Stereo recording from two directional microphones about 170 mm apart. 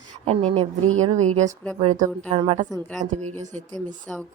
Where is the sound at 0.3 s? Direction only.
35° right (ahead or behind).